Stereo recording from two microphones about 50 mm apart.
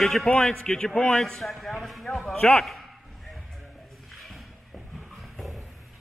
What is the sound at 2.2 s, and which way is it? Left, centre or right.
Speech, left.